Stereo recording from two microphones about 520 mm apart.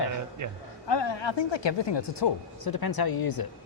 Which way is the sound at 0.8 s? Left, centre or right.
Left.